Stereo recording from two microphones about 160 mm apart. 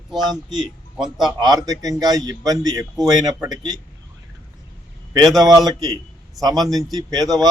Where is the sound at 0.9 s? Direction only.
Centre (ahead or behind).